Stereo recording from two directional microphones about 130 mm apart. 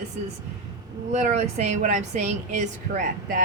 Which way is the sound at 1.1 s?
65° right (ahead or behind).